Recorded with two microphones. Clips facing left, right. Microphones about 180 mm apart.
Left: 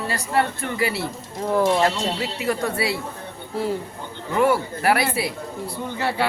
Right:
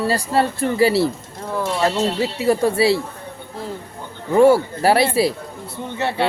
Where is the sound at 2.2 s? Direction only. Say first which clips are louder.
Right 8 dB; 30° right (ahead or behind).